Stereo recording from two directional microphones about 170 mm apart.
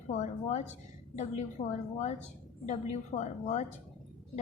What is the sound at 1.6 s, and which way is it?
Speech, 45° left (ahead or behind).